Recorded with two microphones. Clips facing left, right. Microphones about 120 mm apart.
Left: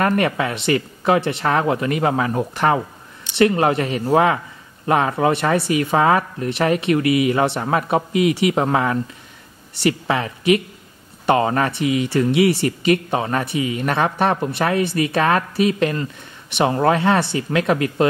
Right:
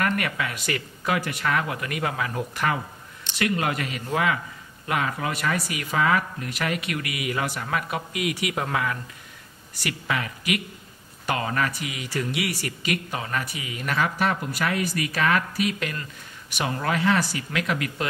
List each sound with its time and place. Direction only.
0.0 s speech: 30° left (ahead or behind)